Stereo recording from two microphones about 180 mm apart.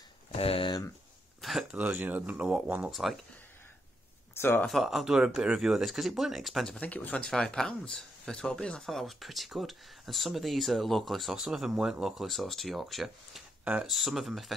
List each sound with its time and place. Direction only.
0.3 s a sound: 35° left (ahead or behind)
1.4 s speech: centre (ahead or behind)
4.4 s speech: 10° left (ahead or behind)
4.6 s speech: centre (ahead or behind)